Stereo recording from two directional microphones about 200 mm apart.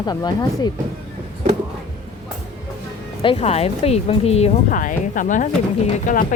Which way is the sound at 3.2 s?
30° left (ahead or behind).